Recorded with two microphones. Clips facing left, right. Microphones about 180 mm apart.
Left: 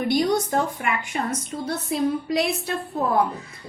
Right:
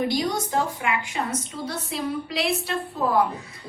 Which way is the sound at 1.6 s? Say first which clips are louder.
Left 7 dB; 50° left (ahead or behind).